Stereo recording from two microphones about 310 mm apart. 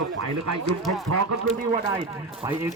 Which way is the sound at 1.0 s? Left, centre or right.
Right.